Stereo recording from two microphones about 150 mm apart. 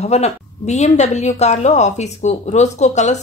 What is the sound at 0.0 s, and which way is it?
Speech, 45° left (ahead or behind).